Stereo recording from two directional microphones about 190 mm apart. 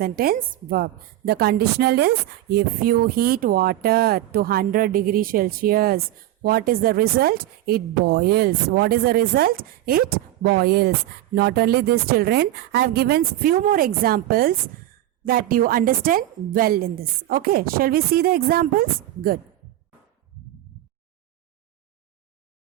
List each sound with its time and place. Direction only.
0.0 s a woman's voice: 50° right (ahead or behind)